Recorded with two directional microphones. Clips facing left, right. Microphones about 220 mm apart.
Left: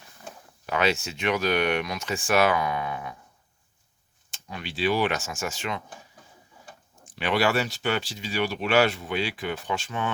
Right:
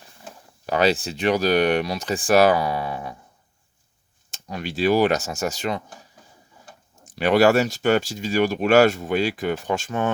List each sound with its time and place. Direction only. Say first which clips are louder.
0.6 s speech: right 5 dB; 35° right (ahead or behind)
4.3 s speech: right 7 dB; 45° right (ahead or behind)
7.0 s speech: right 8 dB; 45° right (ahead or behind)